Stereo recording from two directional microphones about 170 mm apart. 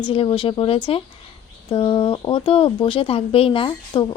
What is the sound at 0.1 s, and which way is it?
Speech, 30° left (ahead or behind).